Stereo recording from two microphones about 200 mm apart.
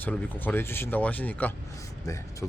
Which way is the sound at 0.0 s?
10° left (ahead or behind).